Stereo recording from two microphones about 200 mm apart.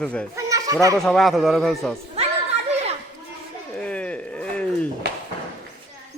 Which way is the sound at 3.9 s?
5° left (ahead or behind).